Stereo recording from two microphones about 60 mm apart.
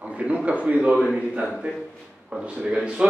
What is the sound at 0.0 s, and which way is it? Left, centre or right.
A man's voice, right.